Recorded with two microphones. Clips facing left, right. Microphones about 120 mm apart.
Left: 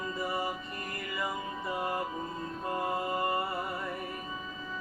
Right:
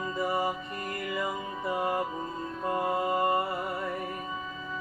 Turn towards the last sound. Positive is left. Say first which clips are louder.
# right 4 dB
turn(degrees=-30)  # may be behind; listen again after turning